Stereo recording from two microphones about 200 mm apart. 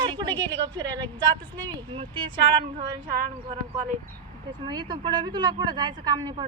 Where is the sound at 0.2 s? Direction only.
20° right (ahead or behind).